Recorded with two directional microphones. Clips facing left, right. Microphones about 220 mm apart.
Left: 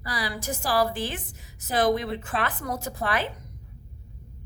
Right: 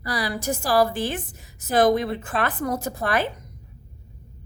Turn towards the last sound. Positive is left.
turn(degrees=-45)  # may be behind; listen again after turning